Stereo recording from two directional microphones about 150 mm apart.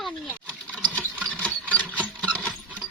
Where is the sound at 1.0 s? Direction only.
10° right (ahead or behind).